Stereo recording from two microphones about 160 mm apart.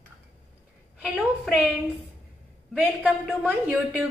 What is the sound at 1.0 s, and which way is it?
Speech, 5° right (ahead or behind).